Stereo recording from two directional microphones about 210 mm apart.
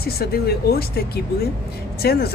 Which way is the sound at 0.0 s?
45° left (ahead or behind).